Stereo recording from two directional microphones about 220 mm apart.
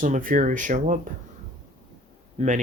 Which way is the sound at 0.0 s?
40° right (ahead or behind).